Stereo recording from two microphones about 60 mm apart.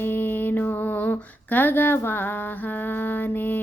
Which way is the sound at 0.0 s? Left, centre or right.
Left.